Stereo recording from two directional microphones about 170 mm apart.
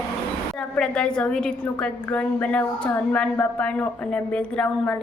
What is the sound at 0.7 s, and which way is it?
A woman's voice, 5° left (ahead or behind).